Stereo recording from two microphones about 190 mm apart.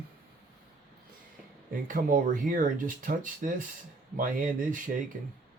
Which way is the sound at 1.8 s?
45° right (ahead or behind).